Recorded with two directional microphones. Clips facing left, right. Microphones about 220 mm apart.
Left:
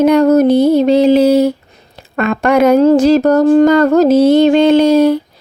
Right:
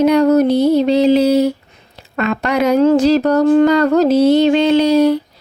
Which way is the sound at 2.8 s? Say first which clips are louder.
Left 3 dB; 40° left (ahead or behind).